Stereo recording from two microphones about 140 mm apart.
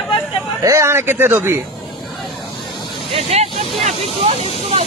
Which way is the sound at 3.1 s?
45° right (ahead or behind).